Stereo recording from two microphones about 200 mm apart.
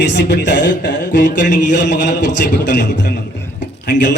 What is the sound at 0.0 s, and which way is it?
A man's voice, 60° left (ahead or behind).